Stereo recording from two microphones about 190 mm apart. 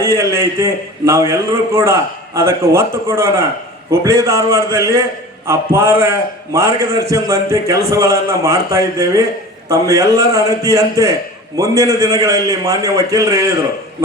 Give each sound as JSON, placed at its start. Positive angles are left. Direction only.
{"t": 0.0, "sound": "a man's voice", "side_deg": -15}